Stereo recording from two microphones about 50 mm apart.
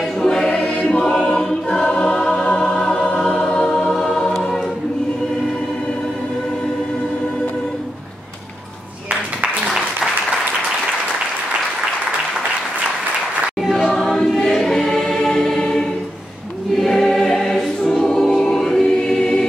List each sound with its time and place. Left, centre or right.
0.0 s choir: centre
2.2 s music: centre
9.7 s applause: centre
13.6 s choir: centre
13.8 s choir: centre